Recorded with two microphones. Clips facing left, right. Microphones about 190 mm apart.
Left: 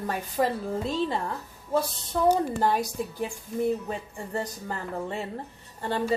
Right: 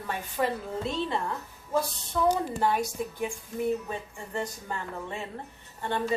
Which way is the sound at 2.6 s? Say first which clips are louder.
Left 2 dB; 35° left (ahead or behind).